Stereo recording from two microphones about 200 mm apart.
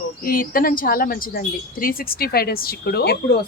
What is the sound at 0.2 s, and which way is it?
Speech, 45° left (ahead or behind).